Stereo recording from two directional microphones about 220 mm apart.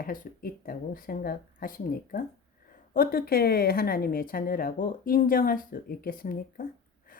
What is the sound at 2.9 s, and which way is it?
Speech, 40° left (ahead or behind).